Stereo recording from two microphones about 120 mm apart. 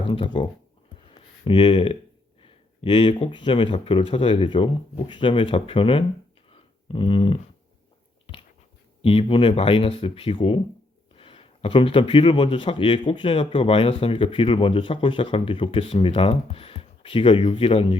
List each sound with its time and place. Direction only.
0.0 s a man's voice: 45° left (ahead or behind)
1.5 s a man's voice: 45° left (ahead or behind)
6.5 s a sound: 45° left (ahead or behind)
9.0 s a man's voice: 50° left (ahead or behind)